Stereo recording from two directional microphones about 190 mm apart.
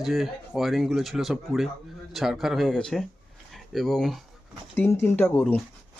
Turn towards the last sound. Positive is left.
turn(degrees=10)  # may be behind; listen again after turning